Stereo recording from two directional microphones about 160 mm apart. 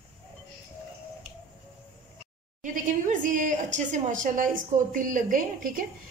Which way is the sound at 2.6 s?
55° right (ahead or behind).